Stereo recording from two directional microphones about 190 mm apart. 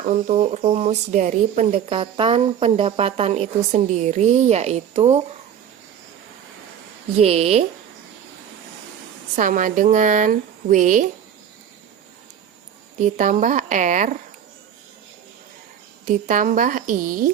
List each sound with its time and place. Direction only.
0.0 s speech: 40° right (ahead or behind)
7.2 s speech: 35° right (ahead or behind)
9.3 s speech: 45° right (ahead or behind)
13.0 s speech: 40° right (ahead or behind)
16.2 s speech: 45° right (ahead or behind)